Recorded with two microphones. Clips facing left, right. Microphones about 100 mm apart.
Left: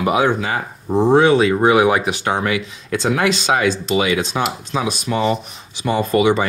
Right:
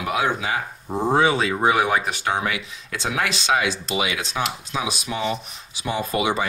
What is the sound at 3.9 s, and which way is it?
Speech, 40° left (ahead or behind).